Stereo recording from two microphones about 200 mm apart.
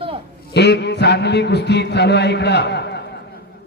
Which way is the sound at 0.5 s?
55° left (ahead or behind).